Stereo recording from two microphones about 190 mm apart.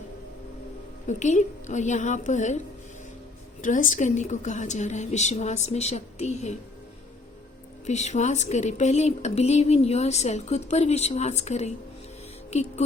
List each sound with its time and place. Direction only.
1.0 s speech: 40° left (ahead or behind)
3.6 s speech: 45° left (ahead or behind)
7.9 s speech: 35° left (ahead or behind)